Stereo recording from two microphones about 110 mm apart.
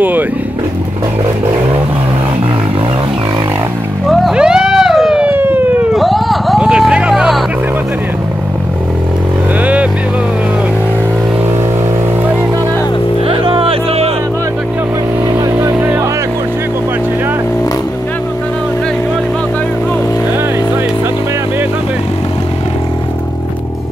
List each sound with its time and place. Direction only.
4.1 s vehicle: centre (ahead or behind)
5.2 s emergency vehicle: 20° right (ahead or behind)
5.9 s vehicle: centre (ahead or behind)
13.3 s music: 55° right (ahead or behind)